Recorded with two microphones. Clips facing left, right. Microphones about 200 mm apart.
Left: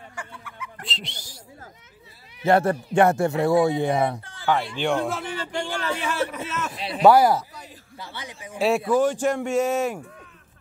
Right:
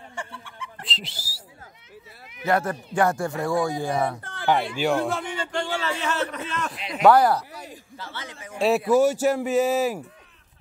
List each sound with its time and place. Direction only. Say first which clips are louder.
0.1 s a sound: right 4 dB; 30° right (ahead or behind)
0.8 s whistling: left 1 dB; centre (ahead or behind)
2.3 s speech: left 4 dB; 30° left (ahead or behind)
4.2 s a sound: right 7 dB; 60° right (ahead or behind)
4.5 s speech: right 1 dB; 15° right (ahead or behind)
4.8 s a man's voice: even; centre (ahead or behind)
6.7 s a man's voice: left 4 dB; 35° left (ahead or behind)
7.1 s a man's voice: left 1 dB; 10° left (ahead or behind)
8.5 s speech: right 1 dB; centre (ahead or behind)